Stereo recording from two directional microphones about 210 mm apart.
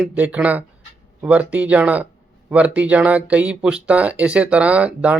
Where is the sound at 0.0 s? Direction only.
5° right (ahead or behind).